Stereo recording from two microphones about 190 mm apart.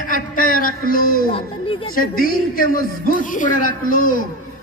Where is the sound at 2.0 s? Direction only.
50° left (ahead or behind).